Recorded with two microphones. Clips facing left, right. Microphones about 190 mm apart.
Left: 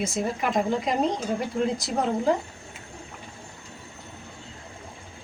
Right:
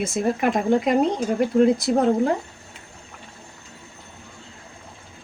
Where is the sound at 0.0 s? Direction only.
55° right (ahead or behind).